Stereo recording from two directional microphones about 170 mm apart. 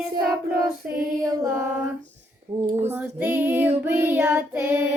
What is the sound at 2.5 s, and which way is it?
Speech, 40° right (ahead or behind).